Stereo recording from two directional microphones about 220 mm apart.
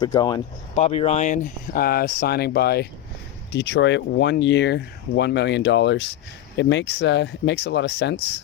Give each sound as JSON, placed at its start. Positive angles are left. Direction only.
{"t": 0.0, "sound": "speech", "side_deg": 15}
{"t": 0.8, "sound": "speech", "side_deg": 30}